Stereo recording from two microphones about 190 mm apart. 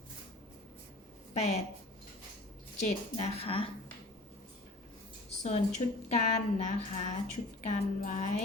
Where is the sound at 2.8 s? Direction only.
35° left (ahead or behind).